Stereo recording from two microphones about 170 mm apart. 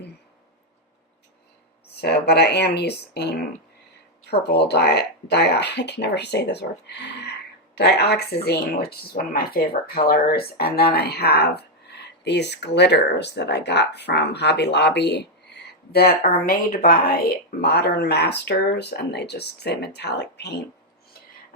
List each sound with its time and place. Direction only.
2.0 s speech: 70° left (ahead or behind); by 7.3 s 90° left
7.8 s speech: 75° left (ahead or behind)